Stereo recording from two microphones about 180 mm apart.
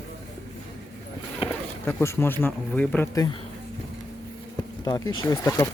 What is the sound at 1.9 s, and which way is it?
A man's voice, 15° left (ahead or behind).